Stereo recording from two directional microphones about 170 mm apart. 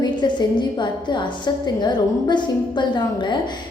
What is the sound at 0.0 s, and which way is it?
A woman's voice, 25° left (ahead or behind).